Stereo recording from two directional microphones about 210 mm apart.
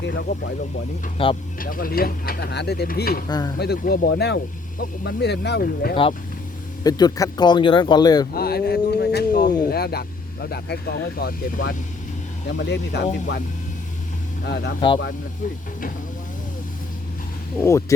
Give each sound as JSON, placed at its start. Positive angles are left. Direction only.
{"t": 0.0, "sound": "speech", "side_deg": 55}
{"t": 1.2, "sound": "speech", "side_deg": 25}
{"t": 1.5, "sound": "speech", "side_deg": 40}
{"t": 3.2, "sound": "speech", "side_deg": 20}
{"t": 3.6, "sound": "speech", "side_deg": 50}
{"t": 5.9, "sound": "speech", "side_deg": 25}
{"t": 8.3, "sound": "a sound", "side_deg": 45}
{"t": 9.6, "sound": "speech", "side_deg": 50}
{"t": 12.5, "sound": "speech", "side_deg": 55}
{"t": 14.4, "sound": "speech", "side_deg": 50}
{"t": 17.6, "sound": "speech", "side_deg": 15}